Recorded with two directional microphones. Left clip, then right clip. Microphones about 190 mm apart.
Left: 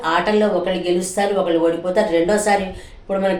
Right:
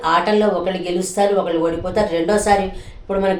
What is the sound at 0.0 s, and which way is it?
A woman's voice, 15° right (ahead or behind).